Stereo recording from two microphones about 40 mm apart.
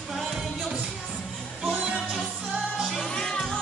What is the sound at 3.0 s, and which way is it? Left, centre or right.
Music, left.